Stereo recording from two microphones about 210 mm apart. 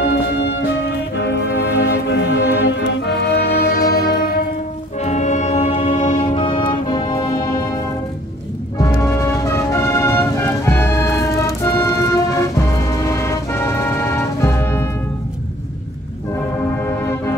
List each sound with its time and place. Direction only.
0.0 s music: 55° left (ahead or behind)
5.0 s music: 35° left (ahead or behind)
8.7 s music: 15° left (ahead or behind)
16.8 s music: 10° left (ahead or behind)